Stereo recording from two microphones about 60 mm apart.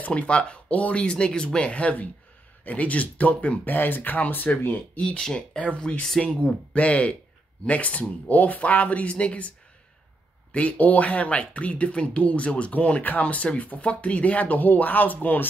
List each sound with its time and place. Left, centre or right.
0.0 s speech: centre
4.9 s speech: centre
10.5 s speech: left